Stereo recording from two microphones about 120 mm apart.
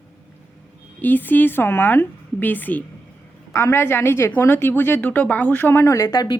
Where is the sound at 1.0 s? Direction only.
15° left (ahead or behind).